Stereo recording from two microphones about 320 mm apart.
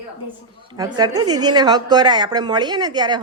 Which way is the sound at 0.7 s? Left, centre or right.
Centre.